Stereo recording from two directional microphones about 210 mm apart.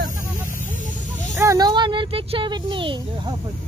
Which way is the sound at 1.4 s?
15° right (ahead or behind).